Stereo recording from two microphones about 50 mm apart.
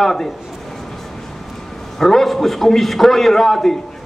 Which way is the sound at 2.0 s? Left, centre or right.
Centre.